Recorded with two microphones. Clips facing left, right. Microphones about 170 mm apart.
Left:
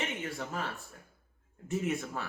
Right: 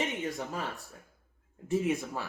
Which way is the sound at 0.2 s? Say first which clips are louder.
Right 4 dB; 15° right (ahead or behind).